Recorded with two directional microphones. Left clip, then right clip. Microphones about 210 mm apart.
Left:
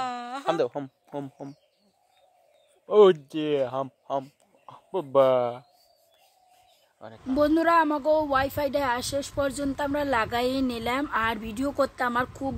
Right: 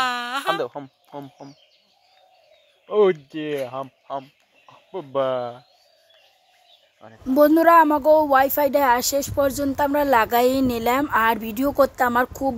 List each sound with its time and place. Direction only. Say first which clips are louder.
0.0 s a sound: right 7 dB; centre (ahead or behind)
0.6 s speech: left 1 dB; 20° left (ahead or behind)
2.9 s speech: left 1 dB; centre (ahead or behind)
3.6 s speech: left 1 dB; 15° left (ahead or behind)
7.2 s speech: right 7 dB; 15° right (ahead or behind)